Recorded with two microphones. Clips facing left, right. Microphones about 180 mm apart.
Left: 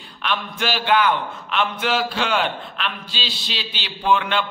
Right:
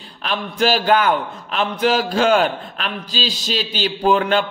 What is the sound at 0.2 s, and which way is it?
A man's voice, 35° right (ahead or behind).